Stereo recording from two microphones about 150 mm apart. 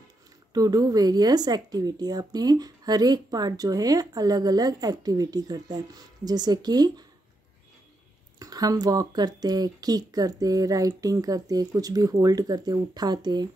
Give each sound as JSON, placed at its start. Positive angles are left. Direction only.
{"t": 0.5, "sound": "a woman's voice", "side_deg": -25}
{"t": 8.4, "sound": "a woman's voice", "side_deg": -25}